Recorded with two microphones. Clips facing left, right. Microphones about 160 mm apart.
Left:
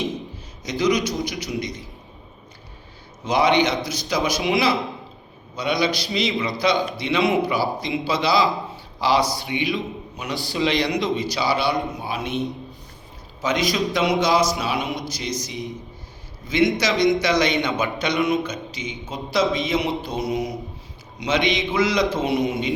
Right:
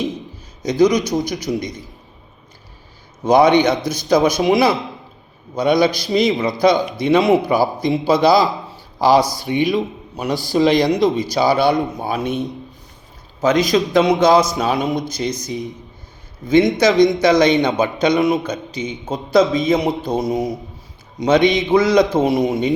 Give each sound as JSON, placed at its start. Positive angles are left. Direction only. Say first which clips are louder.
{"t": 0.8, "sound": "a man's voice", "louder": "right 6 dB", "side_deg": -45}
{"t": 3.2, "sound": "a man's voice", "louder": "right 7 dB", "side_deg": -50}
{"t": 13.4, "sound": "a man's voice", "louder": "right 7 dB", "side_deg": -45}
{"t": 17.2, "sound": "a man's voice", "louder": "right 7 dB", "side_deg": -50}